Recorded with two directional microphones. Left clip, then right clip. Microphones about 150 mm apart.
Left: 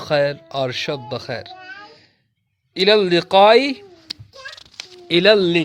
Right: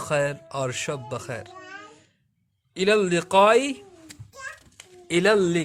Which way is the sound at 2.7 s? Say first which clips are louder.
Left 6 dB; 35° left (ahead or behind).